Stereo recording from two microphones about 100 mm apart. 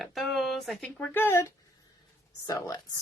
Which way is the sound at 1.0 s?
20° left (ahead or behind).